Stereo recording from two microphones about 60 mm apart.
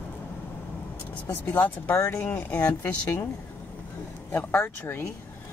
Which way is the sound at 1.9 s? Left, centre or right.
Left.